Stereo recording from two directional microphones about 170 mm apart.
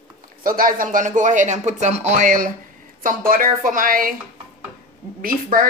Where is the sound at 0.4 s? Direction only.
55° right (ahead or behind).